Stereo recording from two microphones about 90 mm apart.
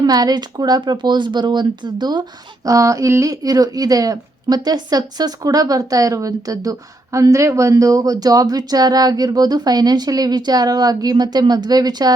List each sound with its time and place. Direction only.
0.0 s a woman's voice: 45° right (ahead or behind)
2.6 s a woman's voice: 40° right (ahead or behind)